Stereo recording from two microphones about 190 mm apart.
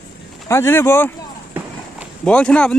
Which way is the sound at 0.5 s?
10° left (ahead or behind).